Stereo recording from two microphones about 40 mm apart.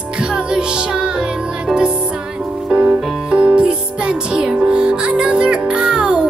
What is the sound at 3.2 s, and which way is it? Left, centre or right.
Music, right.